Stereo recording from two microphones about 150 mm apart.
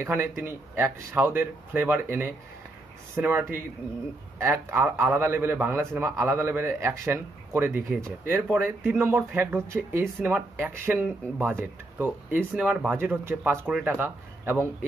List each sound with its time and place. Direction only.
0.0 s a man's voice: 15° right (ahead or behind)